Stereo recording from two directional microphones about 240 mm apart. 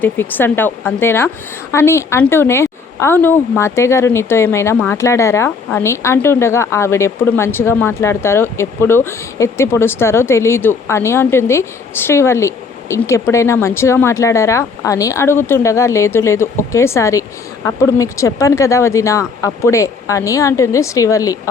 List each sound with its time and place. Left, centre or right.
0.0 s speech: centre